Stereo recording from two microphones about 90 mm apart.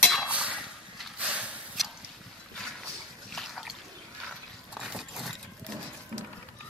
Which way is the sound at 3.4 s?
Centre (ahead or behind).